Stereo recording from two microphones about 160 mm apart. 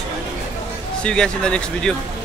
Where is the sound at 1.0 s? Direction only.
5° left (ahead or behind).